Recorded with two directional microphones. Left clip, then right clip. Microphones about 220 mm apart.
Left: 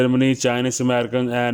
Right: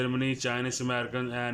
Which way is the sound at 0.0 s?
35° left (ahead or behind).